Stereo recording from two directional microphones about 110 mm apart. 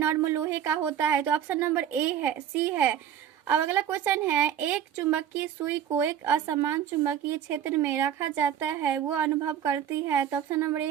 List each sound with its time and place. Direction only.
0.0 s a woman's voice: 20° right (ahead or behind)
9.4 s speech: 30° right (ahead or behind)